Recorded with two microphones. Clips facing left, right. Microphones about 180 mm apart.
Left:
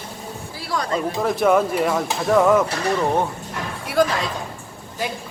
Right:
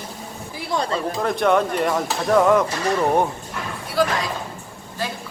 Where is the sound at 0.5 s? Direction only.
20° right (ahead or behind).